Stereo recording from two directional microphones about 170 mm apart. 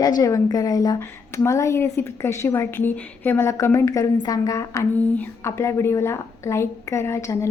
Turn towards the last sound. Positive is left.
turn(degrees=15)  # may be behind; listen again after turning